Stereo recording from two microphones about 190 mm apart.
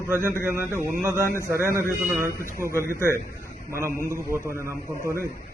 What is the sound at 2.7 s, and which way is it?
Speech, 15° left (ahead or behind).